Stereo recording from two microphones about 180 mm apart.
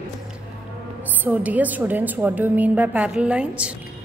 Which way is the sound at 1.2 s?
10° right (ahead or behind).